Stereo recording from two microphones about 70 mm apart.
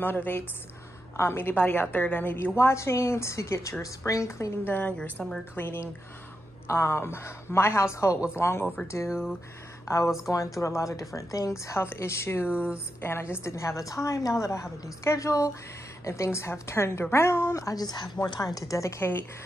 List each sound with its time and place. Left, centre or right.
0.0 s a woman's voice: left
2.5 s a woman's voice: left
4.6 s a woman's voice: left
5.2 s a woman's voice: centre
5.6 s a woman's voice: left
17.8 s speech: left